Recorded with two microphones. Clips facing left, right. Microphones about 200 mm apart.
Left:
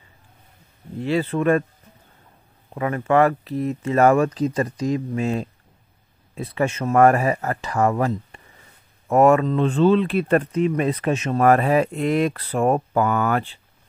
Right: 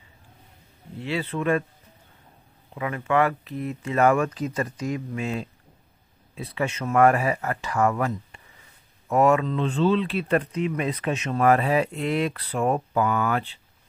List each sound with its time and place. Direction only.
0.9 s speech: 45° left (ahead or behind)
2.7 s speech: 45° left (ahead or behind)
9.1 s speech: 45° left (ahead or behind)